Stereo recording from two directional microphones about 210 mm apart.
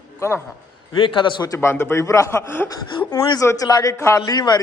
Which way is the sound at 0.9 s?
25° left (ahead or behind).